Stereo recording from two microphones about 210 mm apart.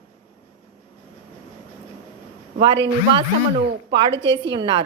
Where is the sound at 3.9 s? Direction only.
25° right (ahead or behind).